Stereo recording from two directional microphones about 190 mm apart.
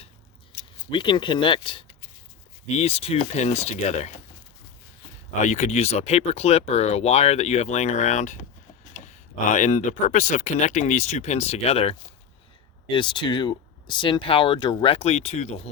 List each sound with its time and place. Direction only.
0.9 s speech: 25° left (ahead or behind)
5.4 s speech: 40° left (ahead or behind)